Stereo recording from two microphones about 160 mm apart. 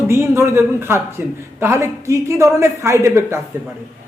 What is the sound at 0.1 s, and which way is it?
A woman's voice, 15° right (ahead or behind).